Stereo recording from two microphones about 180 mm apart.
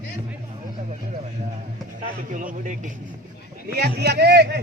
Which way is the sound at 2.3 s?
45° right (ahead or behind).